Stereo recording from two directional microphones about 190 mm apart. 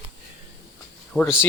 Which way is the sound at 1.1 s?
Centre (ahead or behind).